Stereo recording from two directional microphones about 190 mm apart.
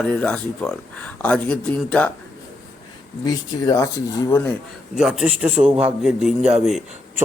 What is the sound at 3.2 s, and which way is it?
Speech, 20° left (ahead or behind).